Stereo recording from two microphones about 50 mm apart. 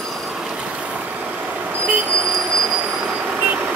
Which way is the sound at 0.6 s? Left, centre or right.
Right.